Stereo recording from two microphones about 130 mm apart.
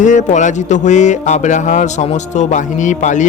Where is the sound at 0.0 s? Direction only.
70° left (ahead or behind).